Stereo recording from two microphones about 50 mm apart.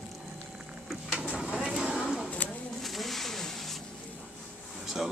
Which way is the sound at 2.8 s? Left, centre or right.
Centre.